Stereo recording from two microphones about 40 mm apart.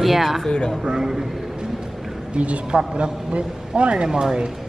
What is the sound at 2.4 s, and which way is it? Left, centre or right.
A man's voice, right.